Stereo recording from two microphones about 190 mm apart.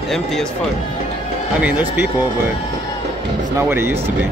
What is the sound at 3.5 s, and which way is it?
Speech, 10° right (ahead or behind).